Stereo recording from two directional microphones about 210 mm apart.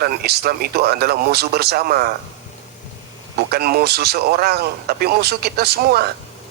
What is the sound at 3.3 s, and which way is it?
A man's voice, 50° right (ahead or behind).